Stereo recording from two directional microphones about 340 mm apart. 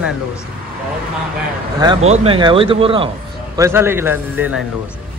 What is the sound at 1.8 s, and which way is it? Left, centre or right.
Speech, centre.